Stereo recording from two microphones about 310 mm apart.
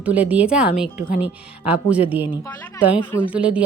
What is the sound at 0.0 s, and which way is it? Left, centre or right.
A woman's voice, centre.